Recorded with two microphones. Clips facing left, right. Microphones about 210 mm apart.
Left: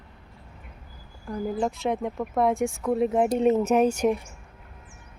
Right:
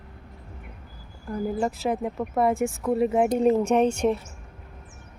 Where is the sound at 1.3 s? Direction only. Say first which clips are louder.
Right 1 dB; centre (ahead or behind).